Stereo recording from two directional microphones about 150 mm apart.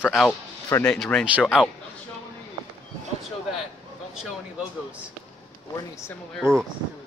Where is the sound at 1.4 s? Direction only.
5° right (ahead or behind).